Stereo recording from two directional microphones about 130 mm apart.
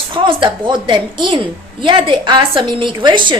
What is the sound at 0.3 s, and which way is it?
A woman's voice, 40° right (ahead or behind).